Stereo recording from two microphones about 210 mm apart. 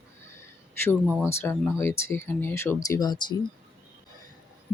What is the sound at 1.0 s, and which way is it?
Speech, 5° right (ahead or behind).